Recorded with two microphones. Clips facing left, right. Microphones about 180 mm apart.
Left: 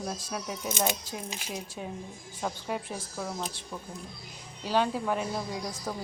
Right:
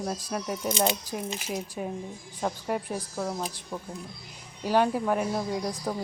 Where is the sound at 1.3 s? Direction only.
Centre (ahead or behind).